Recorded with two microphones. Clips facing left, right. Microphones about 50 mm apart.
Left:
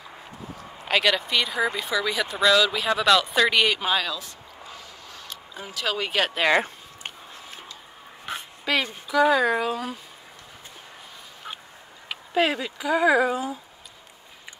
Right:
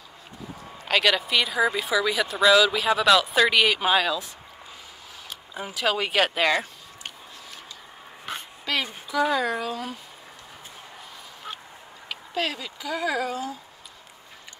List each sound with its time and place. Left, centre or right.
0.8 s speech: centre
5.3 s speech: centre
8.3 s dog: centre
8.8 s speech: centre
9.2 s speech: centre
12.1 s speech: centre